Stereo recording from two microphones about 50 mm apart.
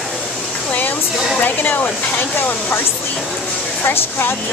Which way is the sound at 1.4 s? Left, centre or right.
Left.